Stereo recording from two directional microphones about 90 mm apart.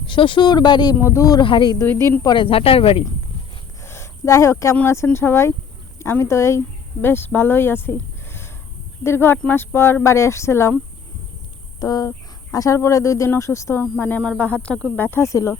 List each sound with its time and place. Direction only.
0.0 s speech: 70° left (ahead or behind)
0.4 s speech: 50° left (ahead or behind)
1.0 s speech: 35° left (ahead or behind)
1.4 s speech: 65° left (ahead or behind); by 3.0 s 90° left
3.8 s a sound: 30° left (ahead or behind)
5.1 s speech: 30° left (ahead or behind)
11.8 s speech: 45° left (ahead or behind)
14.2 s speech: 15° left (ahead or behind)
14.9 s speech: 25° left (ahead or behind)